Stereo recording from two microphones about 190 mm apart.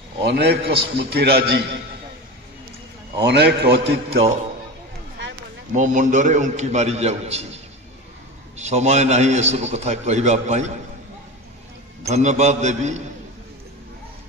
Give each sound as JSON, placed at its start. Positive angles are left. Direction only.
{"t": 0.2, "sound": "a man's voice", "side_deg": -60}
{"t": 3.3, "sound": "a man's voice", "side_deg": -60}
{"t": 5.7, "sound": "a man's voice", "side_deg": -40}
{"t": 12.1, "sound": "a man's voice", "side_deg": -35}